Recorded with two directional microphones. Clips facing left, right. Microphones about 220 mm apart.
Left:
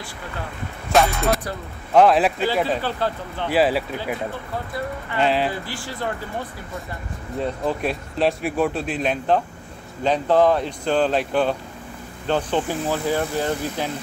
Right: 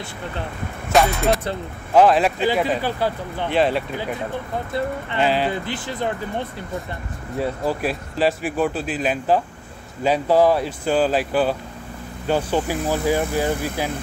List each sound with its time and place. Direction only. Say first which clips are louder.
0.9 s speech: right 1 dB; centre (ahead or behind)
2.4 s speech: right 1 dB; 15° right (ahead or behind)
3.4 s speech: even; 5° left (ahead or behind)
5.2 s speech: even; centre (ahead or behind)
5.5 s speech: right 4 dB; 20° right (ahead or behind)
7.3 s speech: right 1 dB; 5° right (ahead or behind)